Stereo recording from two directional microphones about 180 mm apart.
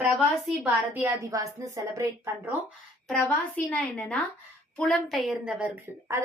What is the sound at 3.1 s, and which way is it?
A woman's voice, 5° left (ahead or behind).